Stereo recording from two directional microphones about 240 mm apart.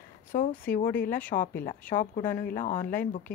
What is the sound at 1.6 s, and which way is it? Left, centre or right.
A woman's voice, left.